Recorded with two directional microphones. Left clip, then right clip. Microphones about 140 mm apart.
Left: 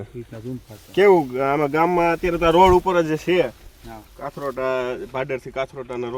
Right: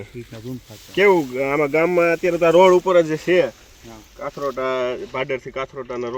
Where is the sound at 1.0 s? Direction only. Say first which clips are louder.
Left 1 dB; 45° left (ahead or behind).